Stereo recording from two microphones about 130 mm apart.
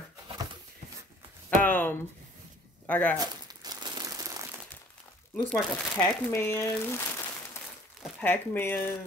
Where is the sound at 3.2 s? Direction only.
30° right (ahead or behind).